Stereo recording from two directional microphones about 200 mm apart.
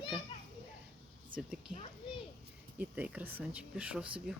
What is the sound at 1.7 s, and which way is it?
Speech, 40° right (ahead or behind).